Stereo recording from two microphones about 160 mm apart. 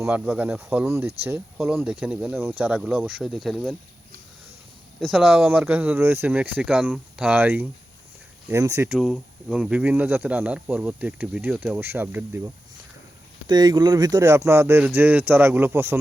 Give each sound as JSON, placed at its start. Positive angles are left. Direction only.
{"t": 0.0, "sound": "speech", "side_deg": -10}
{"t": 1.5, "sound": "speech", "side_deg": -5}
{"t": 4.9, "sound": "speech", "side_deg": -5}
{"t": 8.9, "sound": "speech", "side_deg": 0}
{"t": 13.5, "sound": "speech", "side_deg": -25}